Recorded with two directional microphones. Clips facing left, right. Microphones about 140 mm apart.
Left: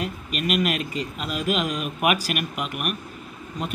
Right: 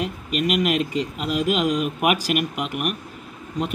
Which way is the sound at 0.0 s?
15° right (ahead or behind).